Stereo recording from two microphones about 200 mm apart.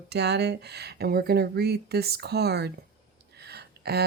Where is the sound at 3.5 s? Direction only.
55° right (ahead or behind).